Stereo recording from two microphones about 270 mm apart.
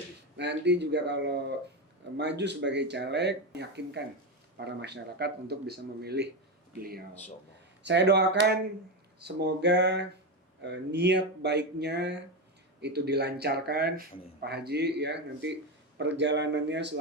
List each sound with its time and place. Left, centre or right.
0.3 s speech: right
7.9 s speech: right